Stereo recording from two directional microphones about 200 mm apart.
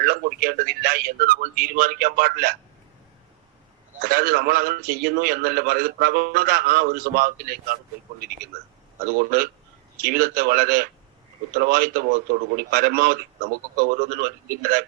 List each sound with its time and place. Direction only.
0.0 s a man's voice: 45° right (ahead or behind)
4.0 s a man's voice: 45° right (ahead or behind)
9.0 s a man's voice: 45° right (ahead or behind)